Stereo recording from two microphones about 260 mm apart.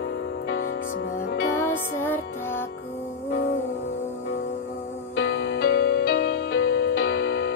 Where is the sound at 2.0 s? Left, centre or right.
Centre.